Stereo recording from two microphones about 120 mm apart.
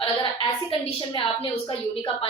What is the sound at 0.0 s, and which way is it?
A woman's voice, 40° left (ahead or behind).